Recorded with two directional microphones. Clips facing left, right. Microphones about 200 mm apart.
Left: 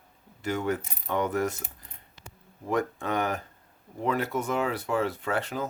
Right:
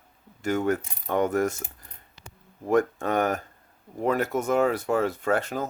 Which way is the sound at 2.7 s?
50° right (ahead or behind).